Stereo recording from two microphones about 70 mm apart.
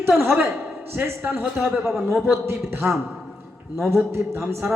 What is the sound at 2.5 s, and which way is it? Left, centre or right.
Speech, right.